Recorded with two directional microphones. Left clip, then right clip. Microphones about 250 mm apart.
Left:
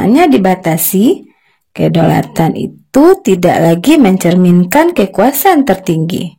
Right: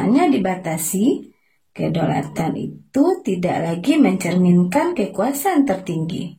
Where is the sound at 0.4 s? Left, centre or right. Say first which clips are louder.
Left 10 dB; left.